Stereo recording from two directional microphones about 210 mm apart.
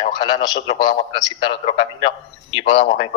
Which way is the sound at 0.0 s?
20° left (ahead or behind).